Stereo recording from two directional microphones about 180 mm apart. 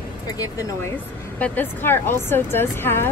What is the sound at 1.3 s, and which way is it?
Speech, 10° left (ahead or behind).